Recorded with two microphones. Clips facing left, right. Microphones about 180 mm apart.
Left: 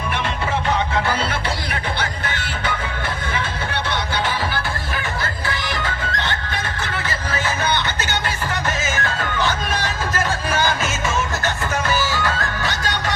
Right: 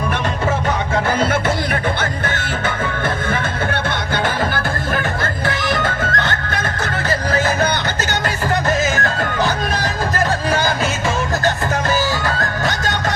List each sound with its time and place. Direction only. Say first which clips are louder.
2.0 s music: right 4 dB; 50° right (ahead or behind)
4.1 s music: right 6 dB; 50° right (ahead or behind)
9.0 s music: right 4 dB; 40° right (ahead or behind)
12.2 s music: right 3 dB; 40° right (ahead or behind)